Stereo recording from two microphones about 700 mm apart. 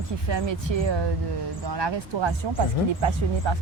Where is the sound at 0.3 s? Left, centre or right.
Right.